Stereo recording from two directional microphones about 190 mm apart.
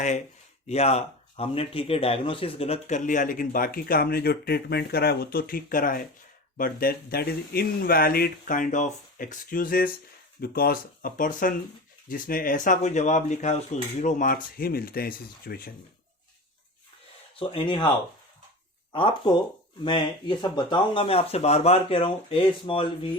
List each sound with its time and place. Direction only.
0.7 s speech: 35° left (ahead or behind); by 15.7 s 50° left (ahead or behind)
17.5 s speech: 25° left (ahead or behind)
18.9 s speech: 25° left (ahead or behind)